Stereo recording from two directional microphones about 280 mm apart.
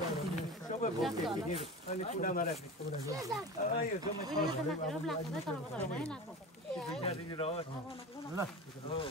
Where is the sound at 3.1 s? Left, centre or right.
Centre.